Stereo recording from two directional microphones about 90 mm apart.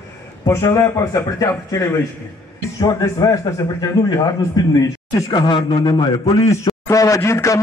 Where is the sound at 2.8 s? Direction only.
40° left (ahead or behind).